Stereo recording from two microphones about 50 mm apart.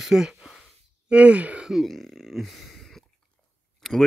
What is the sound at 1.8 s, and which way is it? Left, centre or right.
Speech, centre.